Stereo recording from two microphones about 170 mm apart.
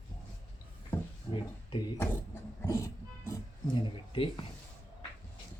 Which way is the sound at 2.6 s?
15° left (ahead or behind).